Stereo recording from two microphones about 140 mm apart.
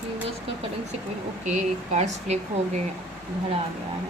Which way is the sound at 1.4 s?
60° right (ahead or behind).